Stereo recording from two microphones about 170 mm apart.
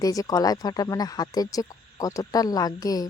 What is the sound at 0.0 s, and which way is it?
Speech, 20° left (ahead or behind).